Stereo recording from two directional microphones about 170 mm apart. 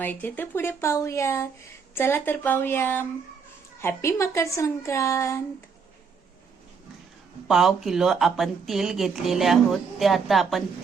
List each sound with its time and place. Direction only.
0.0 s a woman's voice: 10° left (ahead or behind)
7.4 s speech: centre (ahead or behind)